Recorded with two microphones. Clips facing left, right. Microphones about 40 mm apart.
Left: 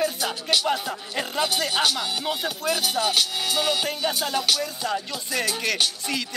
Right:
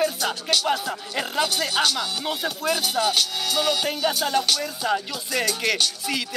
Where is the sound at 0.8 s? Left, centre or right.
Centre.